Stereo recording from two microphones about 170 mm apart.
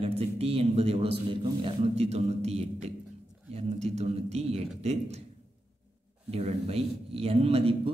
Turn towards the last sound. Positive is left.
turn(degrees=-35)  # may be behind; listen again after turning